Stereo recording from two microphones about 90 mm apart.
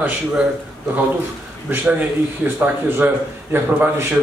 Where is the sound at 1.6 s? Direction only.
20° right (ahead or behind).